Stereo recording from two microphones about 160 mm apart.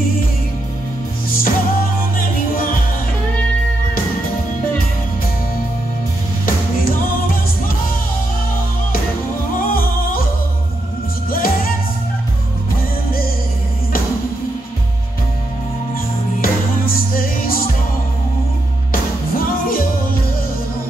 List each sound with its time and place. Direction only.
1.3 s music: 65° left (ahead or behind)
6.4 s music: 65° left (ahead or behind)
9.6 s music: 65° left (ahead or behind)
11.2 s music: 65° left (ahead or behind)
16.3 s music: 65° left (ahead or behind)
18.9 s music: 65° left (ahead or behind)